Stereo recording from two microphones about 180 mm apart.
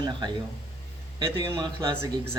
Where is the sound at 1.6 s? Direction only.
25° right (ahead or behind).